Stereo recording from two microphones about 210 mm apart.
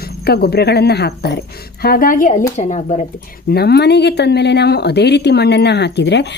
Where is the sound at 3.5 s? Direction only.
50° left (ahead or behind).